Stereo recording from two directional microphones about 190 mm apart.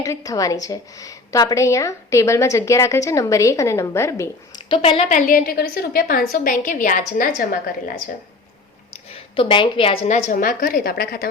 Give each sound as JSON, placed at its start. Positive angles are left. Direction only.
{"t": 0.0, "sound": "a woman's voice", "side_deg": 20}
{"t": 4.7, "sound": "a woman's voice", "side_deg": 30}
{"t": 9.0, "sound": "a woman's voice", "side_deg": 30}